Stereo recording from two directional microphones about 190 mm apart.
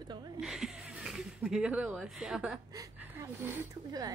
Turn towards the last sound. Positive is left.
turn(degrees=-20)  # may be behind; listen again after turning